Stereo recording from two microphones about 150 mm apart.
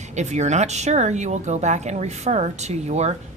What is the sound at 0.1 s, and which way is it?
A woman's voice, 50° right (ahead or behind).